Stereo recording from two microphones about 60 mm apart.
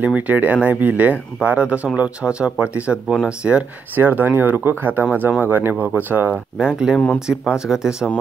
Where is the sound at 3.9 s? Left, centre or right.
Right.